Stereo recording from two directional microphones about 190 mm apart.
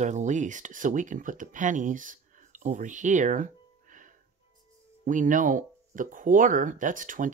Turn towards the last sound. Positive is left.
turn(degrees=-45)  # may be behind; listen again after turning